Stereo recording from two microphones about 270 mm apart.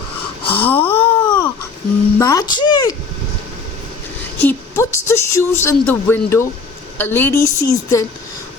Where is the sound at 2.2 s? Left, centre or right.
Centre.